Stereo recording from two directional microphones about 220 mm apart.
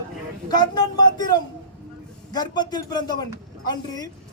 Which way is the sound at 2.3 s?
20° left (ahead or behind).